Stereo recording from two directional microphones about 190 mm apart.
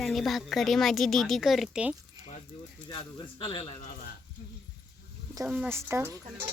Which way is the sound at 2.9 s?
25° left (ahead or behind).